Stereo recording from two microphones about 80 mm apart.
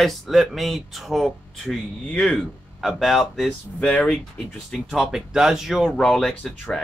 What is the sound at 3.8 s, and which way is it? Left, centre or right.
Speech, centre.